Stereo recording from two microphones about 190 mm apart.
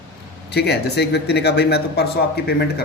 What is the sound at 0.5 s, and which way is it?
Speech, 60° left (ahead or behind).